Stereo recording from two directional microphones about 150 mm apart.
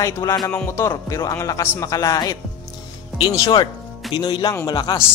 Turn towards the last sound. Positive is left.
turn(degrees=25)  # may be behind; listen again after turning